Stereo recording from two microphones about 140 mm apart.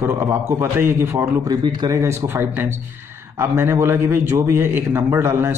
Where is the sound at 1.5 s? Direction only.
30° right (ahead or behind).